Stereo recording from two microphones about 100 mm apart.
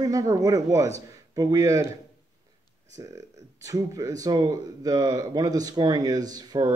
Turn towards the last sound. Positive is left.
turn(degrees=-40)  # may be behind; listen again after turning